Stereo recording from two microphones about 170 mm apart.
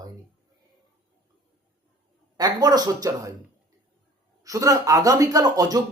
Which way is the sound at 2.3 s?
25° right (ahead or behind).